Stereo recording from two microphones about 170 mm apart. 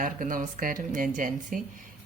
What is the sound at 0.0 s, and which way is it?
Speech, 55° right (ahead or behind).